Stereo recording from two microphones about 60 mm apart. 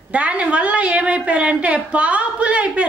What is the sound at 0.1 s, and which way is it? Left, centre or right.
A woman's voice, right.